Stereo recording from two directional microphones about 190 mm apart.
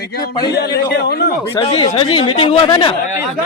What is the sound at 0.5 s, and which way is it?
Speech, 55° left (ahead or behind).